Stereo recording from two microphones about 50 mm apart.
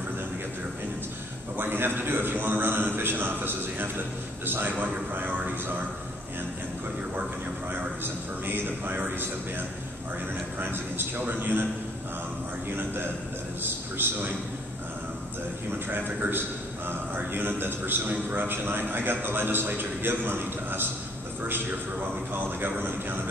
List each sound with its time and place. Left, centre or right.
1.6 s a man's voice: right
8.0 s a man's voice: right
10.6 s a man's voice: right
12.7 s a man's voice: right
15.9 s a man's voice: right
22.3 s a man's voice: right